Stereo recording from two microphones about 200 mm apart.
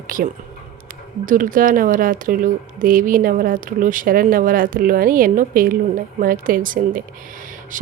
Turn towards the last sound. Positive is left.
turn(degrees=-45)  # may be behind; listen again after turning